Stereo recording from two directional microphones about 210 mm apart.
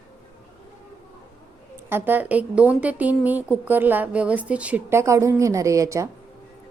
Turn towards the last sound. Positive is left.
turn(degrees=-15)  # may be behind; listen again after turning